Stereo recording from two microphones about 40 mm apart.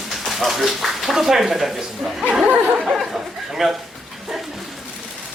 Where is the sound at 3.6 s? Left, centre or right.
Centre.